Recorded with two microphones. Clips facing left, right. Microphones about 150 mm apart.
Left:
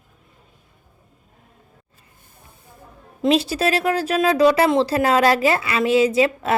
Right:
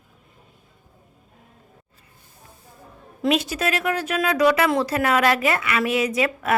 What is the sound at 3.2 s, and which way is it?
Speech, 30° left (ahead or behind).